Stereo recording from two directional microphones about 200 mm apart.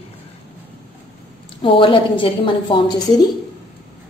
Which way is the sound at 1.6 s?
25° left (ahead or behind).